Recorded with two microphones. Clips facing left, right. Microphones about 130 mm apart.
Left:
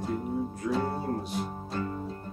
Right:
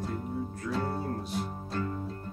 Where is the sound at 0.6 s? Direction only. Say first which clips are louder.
Left 2 dB; 15° left (ahead or behind).